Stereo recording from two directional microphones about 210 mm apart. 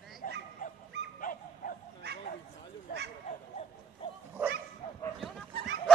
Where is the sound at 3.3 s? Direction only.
35° left (ahead or behind).